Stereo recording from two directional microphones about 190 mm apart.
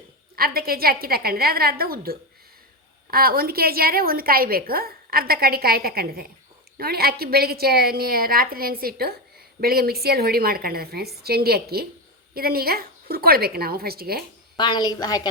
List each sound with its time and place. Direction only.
0.3 s a woman's voice: 50° right (ahead or behind)
14.5 s a woman's voice: 25° left (ahead or behind)